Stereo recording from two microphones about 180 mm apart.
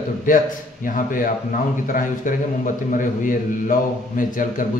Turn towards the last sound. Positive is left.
turn(degrees=50)  # may be behind; listen again after turning